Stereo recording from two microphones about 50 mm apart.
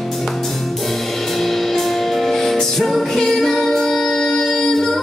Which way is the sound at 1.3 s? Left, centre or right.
Centre.